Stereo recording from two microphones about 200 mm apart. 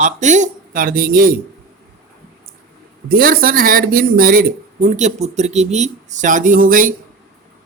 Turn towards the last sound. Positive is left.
turn(degrees=-40)  # may be behind; listen again after turning